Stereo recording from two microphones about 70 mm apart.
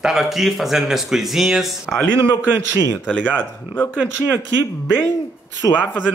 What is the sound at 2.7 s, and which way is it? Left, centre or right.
Speech, left.